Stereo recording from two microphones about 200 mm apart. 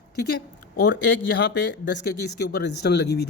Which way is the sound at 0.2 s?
55° left (ahead or behind).